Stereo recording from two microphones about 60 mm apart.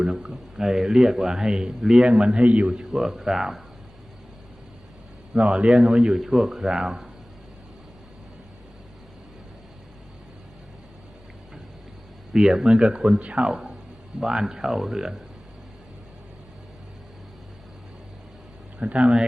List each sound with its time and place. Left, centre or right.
0.0 s a man's voice: centre
2.7 s speech: centre
5.3 s a man's voice: centre
12.3 s a man's voice: centre
18.8 s a man's voice: centre